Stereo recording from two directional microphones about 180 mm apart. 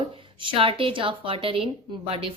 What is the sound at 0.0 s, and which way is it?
A woman's voice, 30° right (ahead or behind).